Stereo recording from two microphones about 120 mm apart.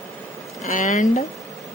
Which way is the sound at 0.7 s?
90° left.